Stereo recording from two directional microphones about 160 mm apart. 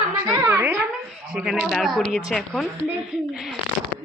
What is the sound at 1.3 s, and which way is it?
Speech, 5° right (ahead or behind).